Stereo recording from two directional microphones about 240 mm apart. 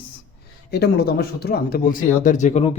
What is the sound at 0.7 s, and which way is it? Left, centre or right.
Speech, left.